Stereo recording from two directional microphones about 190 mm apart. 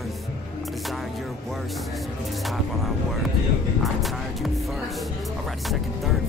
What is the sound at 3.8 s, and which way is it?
Music, centre (ahead or behind).